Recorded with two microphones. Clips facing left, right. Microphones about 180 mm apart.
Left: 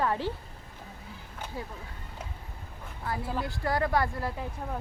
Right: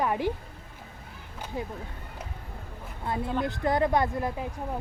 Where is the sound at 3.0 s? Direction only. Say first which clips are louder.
Right 4 dB; 25° right (ahead or behind).